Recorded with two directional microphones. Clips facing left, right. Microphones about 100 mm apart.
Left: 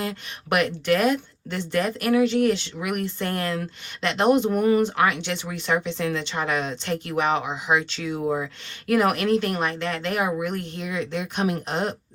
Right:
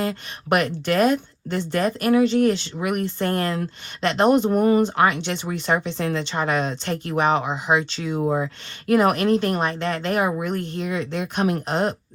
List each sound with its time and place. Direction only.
0.0 s speech: 40° right (ahead or behind)
7.8 s speech: 25° right (ahead or behind); by 11.9 s 45° right (ahead or behind)